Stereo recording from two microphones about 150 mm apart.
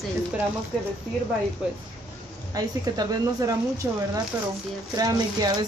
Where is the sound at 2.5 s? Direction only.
25° right (ahead or behind).